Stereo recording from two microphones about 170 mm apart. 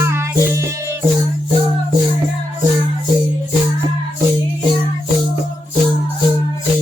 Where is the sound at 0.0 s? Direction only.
15° right (ahead or behind).